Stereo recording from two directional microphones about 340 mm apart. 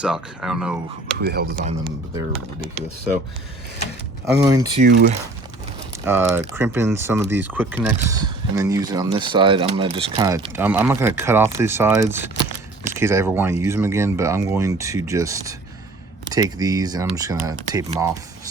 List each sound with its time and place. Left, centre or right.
0.0 s speech: centre
1.2 s speech: right
1.8 s speech: centre
4.3 s speech: centre
4.8 s speech: right
6.1 s speech: centre